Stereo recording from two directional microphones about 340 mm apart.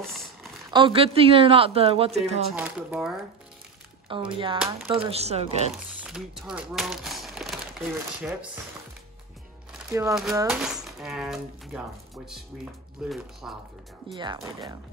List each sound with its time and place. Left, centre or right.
0.0 s a sound: centre
0.7 s speech: centre
2.5 s speech: centre
4.1 s speech: centre
5.9 s a sound: centre
9.8 s speech: centre
13.1 s speech: centre
14.1 s speech: centre